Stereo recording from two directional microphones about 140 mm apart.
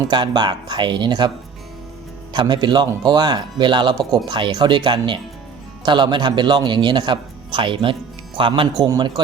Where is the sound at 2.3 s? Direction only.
30° right (ahead or behind).